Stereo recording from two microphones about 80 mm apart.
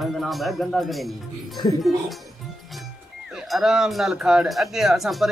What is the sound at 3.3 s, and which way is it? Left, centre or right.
Speech, centre.